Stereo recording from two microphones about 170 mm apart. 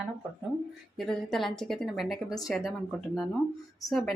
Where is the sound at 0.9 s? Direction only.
Centre (ahead or behind).